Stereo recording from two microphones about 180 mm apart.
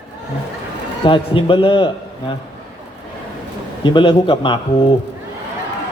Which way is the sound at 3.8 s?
30° left (ahead or behind).